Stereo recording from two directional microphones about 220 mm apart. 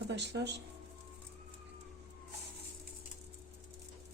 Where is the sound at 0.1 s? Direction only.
50° right (ahead or behind).